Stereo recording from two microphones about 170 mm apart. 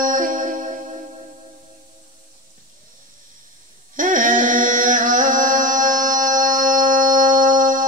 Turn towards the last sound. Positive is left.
turn(degrees=-50)  # may be behind; listen again after turning